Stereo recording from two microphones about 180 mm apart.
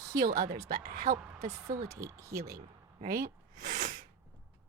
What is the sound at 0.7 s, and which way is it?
Speech, 45° right (ahead or behind).